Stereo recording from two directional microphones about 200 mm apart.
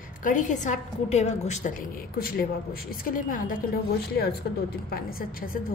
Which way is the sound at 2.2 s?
50° left (ahead or behind).